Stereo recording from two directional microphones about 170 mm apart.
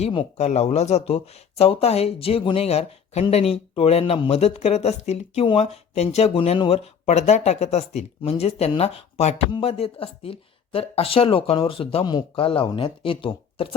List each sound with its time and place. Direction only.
0.0 s speech: 35° left (ahead or behind)